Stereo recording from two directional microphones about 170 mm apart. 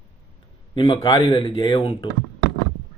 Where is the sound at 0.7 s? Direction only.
25° left (ahead or behind).